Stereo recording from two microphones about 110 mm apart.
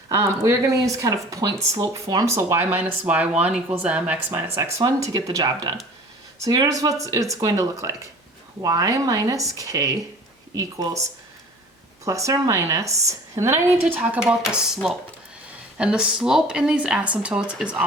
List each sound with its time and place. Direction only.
0.1 s a woman's voice: 30° right (ahead or behind); by 4.2 s 10° right (ahead or behind)
4.3 s a woman's voice: 25° right (ahead or behind)
4.8 s speech: 35° right (ahead or behind)
12.0 s a woman's voice: 30° right (ahead or behind)
14.2 s speech: 5° right (ahead or behind)